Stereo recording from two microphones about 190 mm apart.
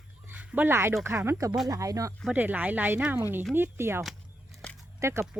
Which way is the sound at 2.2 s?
5° right (ahead or behind).